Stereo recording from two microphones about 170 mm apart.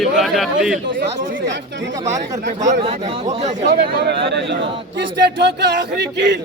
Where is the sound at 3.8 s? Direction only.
70° right (ahead or behind); by 6.4 s 90° right.